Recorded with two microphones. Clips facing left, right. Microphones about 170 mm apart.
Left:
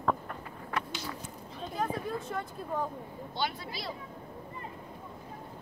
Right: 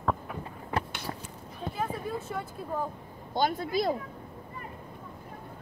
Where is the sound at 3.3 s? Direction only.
45° right (ahead or behind).